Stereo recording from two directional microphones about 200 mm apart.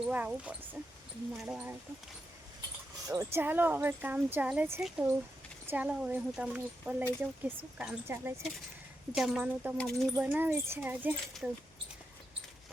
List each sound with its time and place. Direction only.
0.0 s a woman's voice: 5° right (ahead or behind)
3.1 s a woman's voice: 15° right (ahead or behind); by 10.1 s 5° left (ahead or behind)
10.2 s a woman's voice: 10° right (ahead or behind)